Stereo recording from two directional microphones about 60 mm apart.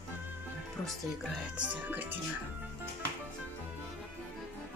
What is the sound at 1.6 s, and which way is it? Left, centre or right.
Speech, right.